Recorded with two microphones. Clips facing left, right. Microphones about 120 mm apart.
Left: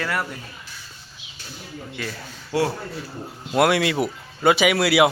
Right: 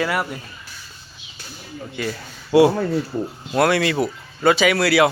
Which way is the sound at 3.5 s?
10° left (ahead or behind).